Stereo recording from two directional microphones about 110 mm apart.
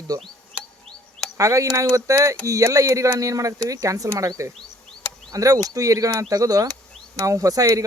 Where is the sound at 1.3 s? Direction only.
30° right (ahead or behind).